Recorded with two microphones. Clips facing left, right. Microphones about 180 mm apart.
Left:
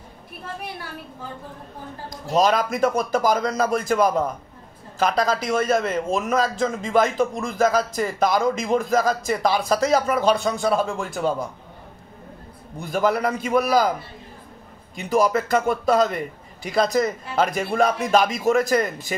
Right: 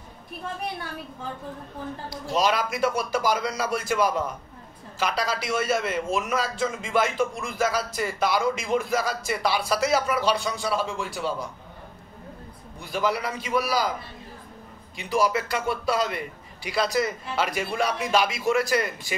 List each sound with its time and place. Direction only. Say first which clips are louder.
2.3 s a man's voice: left 5 dB; 45° left (ahead or behind)
12.8 s a man's voice: left 5 dB; 50° left (ahead or behind)
15.0 s a man's voice: left 4 dB; 45° left (ahead or behind)